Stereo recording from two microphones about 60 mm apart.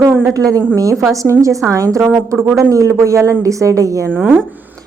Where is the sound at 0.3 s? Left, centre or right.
Right.